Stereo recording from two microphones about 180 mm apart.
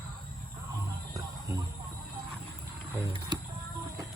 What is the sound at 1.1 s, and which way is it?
Music, 20° right (ahead or behind).